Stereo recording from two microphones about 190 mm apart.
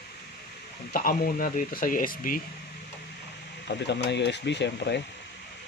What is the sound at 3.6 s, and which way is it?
Speech, 60° left (ahead or behind).